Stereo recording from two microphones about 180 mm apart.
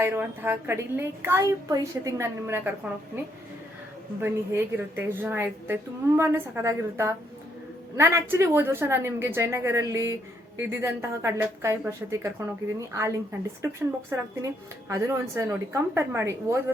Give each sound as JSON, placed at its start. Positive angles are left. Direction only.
{"t": 0.0, "sound": "speech", "side_deg": -10}
{"t": 4.2, "sound": "speech", "side_deg": -10}